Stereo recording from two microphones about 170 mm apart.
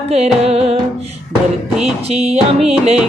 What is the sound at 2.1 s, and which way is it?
Music, 40° right (ahead or behind).